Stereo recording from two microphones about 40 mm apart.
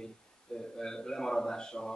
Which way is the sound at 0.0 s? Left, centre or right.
Centre.